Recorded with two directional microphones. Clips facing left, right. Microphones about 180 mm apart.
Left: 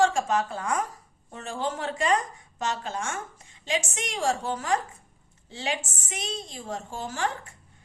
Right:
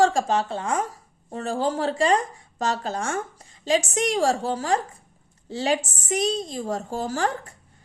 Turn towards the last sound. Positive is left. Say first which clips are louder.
# right 5 dB
turn(degrees=-35)  # may be behind; listen again after turning